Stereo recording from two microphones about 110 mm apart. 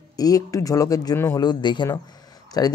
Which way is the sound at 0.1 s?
35° left (ahead or behind).